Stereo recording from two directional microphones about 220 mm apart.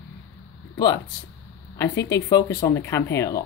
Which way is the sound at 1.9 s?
50° left (ahead or behind).